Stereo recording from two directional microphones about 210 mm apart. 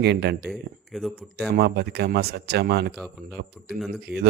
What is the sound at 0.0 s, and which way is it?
Speech, 50° right (ahead or behind).